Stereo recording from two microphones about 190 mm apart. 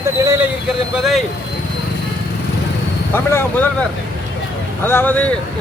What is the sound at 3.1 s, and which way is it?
Speech, 10° left (ahead or behind).